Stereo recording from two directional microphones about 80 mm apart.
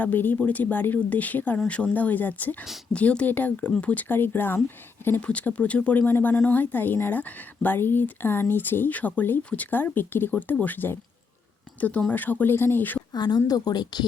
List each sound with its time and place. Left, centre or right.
0.0 s a woman's voice: left
4.1 s a woman's voice: left
5.2 s a woman's voice: centre
13.1 s speech: left